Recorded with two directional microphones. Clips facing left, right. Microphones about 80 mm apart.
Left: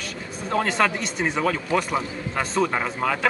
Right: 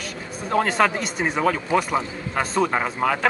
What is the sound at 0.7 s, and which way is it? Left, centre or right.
Speech, centre.